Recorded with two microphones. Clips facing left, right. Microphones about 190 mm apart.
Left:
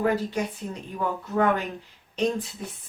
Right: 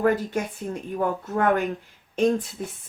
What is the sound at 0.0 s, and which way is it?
Speech, 50° right (ahead or behind).